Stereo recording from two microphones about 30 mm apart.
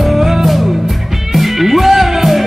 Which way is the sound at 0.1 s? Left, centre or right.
Centre.